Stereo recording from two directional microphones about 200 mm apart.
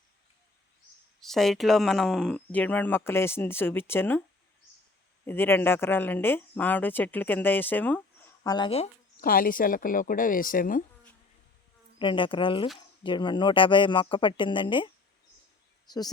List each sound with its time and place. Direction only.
1.2 s speech: centre (ahead or behind)
5.2 s speech: 10° left (ahead or behind)
8.5 s speech: 25° left (ahead or behind)
9.2 s speech: 45° left (ahead or behind)
11.9 s speech: 25° left (ahead or behind)